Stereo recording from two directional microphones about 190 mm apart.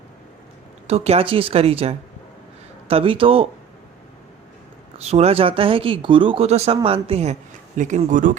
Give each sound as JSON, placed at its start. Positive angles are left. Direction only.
{"t": 0.9, "sound": "speech", "side_deg": -30}
{"t": 4.9, "sound": "speech", "side_deg": -35}